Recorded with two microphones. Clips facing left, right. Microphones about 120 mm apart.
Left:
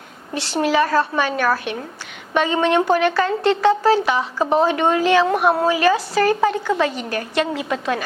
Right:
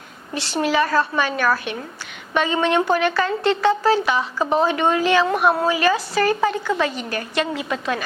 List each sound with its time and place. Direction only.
0.3 s a woman's voice: 55° left (ahead or behind)